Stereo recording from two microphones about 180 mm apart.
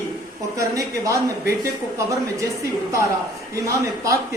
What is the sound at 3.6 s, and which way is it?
Speech, 15° right (ahead or behind).